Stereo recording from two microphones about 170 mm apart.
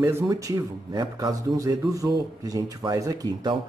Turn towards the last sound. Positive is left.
turn(degrees=-20)  # may be behind; listen again after turning